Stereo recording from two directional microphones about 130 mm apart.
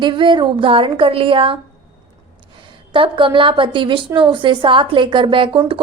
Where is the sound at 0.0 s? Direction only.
40° right (ahead or behind).